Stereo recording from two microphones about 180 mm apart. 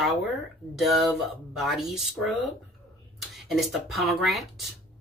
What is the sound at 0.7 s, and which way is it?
Speech, centre (ahead or behind).